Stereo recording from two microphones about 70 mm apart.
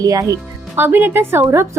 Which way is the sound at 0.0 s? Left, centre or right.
Right.